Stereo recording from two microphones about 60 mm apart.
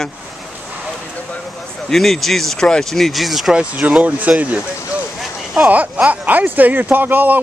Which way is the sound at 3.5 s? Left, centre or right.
Centre.